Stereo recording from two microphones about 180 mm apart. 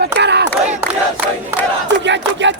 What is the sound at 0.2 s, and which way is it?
Crowd, 70° right (ahead or behind).